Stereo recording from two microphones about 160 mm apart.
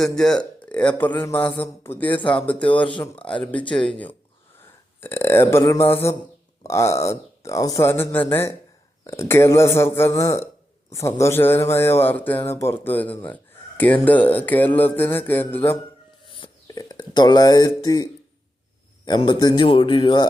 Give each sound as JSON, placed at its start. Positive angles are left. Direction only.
{"t": 0.0, "sound": "speech", "side_deg": 5}
{"t": 16.3, "sound": "a sound", "side_deg": 25}
{"t": 19.0, "sound": "speech", "side_deg": 30}